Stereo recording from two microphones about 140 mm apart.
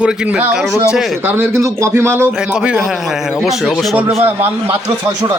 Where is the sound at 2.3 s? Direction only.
5° right (ahead or behind).